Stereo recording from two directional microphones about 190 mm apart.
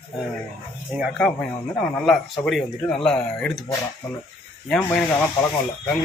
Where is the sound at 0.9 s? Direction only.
5° right (ahead or behind).